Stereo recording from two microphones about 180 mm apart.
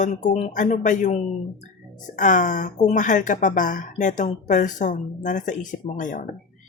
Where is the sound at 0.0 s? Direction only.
40° left (ahead or behind).